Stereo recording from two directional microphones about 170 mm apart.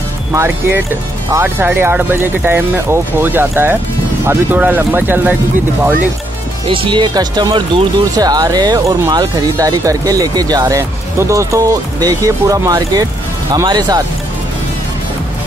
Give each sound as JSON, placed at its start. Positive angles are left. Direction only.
{"t": 0.3, "sound": "speech", "side_deg": -15}
{"t": 6.7, "sound": "speech", "side_deg": -30}